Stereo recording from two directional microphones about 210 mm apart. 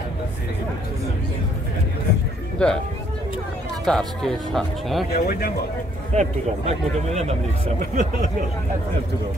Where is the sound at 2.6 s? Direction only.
5° left (ahead or behind).